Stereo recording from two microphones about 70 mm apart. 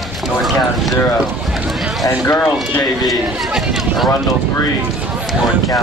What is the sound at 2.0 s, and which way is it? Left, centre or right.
Speech, left.